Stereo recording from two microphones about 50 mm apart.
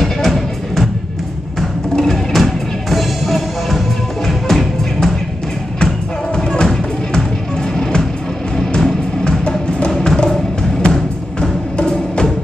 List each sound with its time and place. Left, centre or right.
0.0 s music: centre
2.0 s music: centre